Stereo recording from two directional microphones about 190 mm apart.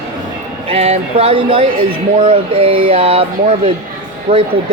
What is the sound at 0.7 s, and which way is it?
Speech, 30° right (ahead or behind).